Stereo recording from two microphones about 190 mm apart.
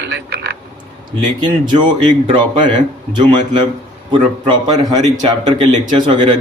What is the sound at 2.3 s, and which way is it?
A man's voice, 25° right (ahead or behind).